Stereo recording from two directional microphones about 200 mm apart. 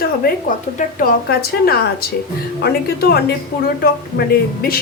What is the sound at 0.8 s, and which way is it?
A woman's voice, 50° left (ahead or behind).